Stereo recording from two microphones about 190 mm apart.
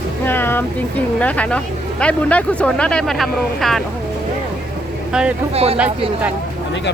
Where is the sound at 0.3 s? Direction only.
10° left (ahead or behind).